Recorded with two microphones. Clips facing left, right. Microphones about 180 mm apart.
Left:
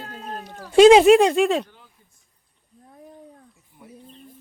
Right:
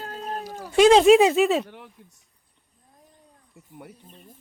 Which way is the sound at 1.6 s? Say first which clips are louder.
Right 9 dB; 75° right (ahead or behind).